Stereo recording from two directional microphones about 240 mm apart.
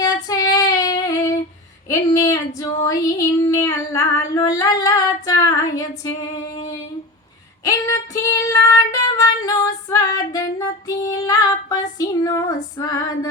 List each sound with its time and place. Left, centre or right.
0.0 s female singing: centre
7.6 s female singing: centre